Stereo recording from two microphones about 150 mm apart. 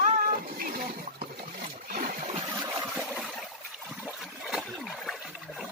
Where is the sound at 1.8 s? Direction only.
65° right (ahead or behind).